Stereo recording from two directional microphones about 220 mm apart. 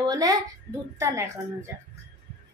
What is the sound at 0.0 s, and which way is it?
A woman's voice, 15° right (ahead or behind).